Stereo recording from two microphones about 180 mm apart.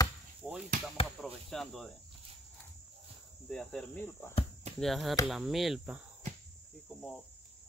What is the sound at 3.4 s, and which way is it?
Speech, 5° left (ahead or behind).